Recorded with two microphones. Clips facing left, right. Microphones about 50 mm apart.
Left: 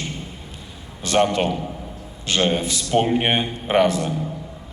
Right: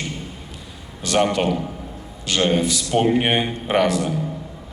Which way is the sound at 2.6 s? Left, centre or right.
Left.